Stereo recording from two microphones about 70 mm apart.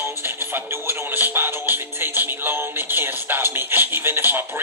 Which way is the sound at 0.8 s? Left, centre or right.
Right.